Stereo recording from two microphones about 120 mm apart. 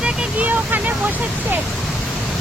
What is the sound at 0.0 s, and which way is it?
Vehicle, 10° right (ahead or behind).